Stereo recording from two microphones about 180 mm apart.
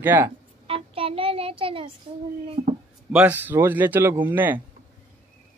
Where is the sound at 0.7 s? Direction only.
30° right (ahead or behind).